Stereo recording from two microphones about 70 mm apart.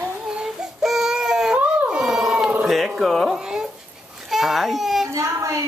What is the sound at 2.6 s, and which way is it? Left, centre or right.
Speech, centre.